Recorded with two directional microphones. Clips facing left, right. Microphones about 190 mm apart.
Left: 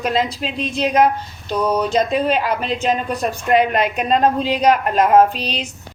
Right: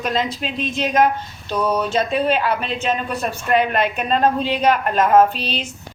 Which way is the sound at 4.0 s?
35° left (ahead or behind).